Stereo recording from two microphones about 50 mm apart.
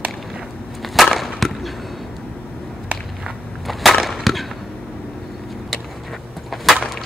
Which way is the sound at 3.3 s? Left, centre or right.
Centre.